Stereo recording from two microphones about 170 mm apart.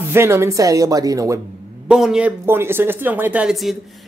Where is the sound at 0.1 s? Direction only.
15° right (ahead or behind).